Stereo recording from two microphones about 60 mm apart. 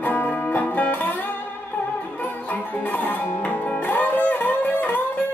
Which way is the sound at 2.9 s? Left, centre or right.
Left.